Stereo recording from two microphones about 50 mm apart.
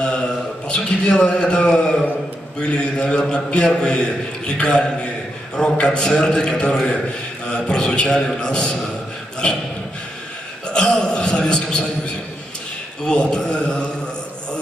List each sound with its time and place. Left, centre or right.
0.7 s a man's voice: left
10.7 s a sound: centre
13.0 s a man's voice: centre